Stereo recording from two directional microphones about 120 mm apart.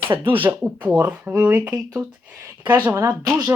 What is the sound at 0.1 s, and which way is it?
Speech, 35° right (ahead or behind).